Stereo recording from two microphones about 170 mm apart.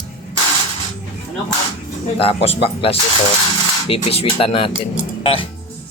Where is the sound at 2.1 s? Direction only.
35° left (ahead or behind).